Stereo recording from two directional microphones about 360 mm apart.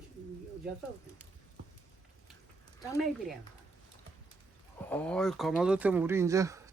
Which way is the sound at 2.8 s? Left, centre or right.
Centre.